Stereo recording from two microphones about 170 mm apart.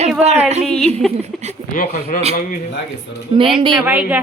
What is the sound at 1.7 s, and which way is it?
Speech, 50° left (ahead or behind).